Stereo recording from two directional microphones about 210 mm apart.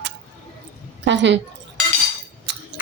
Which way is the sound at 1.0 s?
60° right (ahead or behind).